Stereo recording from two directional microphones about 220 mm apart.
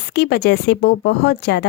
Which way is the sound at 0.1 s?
50° left (ahead or behind).